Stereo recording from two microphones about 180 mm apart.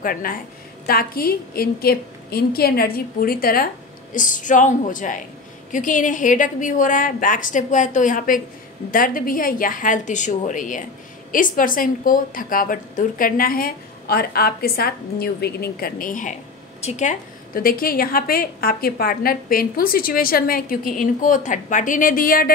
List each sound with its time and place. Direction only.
0.0 s a woman's voice: 50° left (ahead or behind)